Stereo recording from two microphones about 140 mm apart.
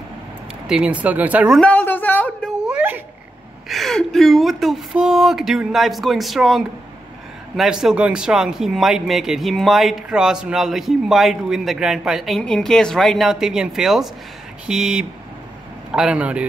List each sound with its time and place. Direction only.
0.7 s speech: 5° right (ahead or behind)
1.6 s a woman's voice: 10° left (ahead or behind)
2.6 s dog: 10° right (ahead or behind)
3.6 s speech: centre (ahead or behind)